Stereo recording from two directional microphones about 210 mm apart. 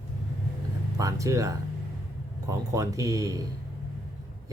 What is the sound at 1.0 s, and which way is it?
Speech, 15° right (ahead or behind).